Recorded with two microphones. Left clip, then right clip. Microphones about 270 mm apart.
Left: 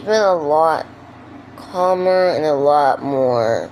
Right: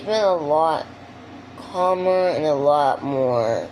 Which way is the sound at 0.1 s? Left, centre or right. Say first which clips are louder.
Left 4 dB; left.